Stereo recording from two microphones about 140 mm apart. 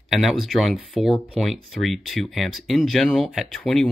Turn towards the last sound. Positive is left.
turn(degrees=0)  # may be behind; listen again after turning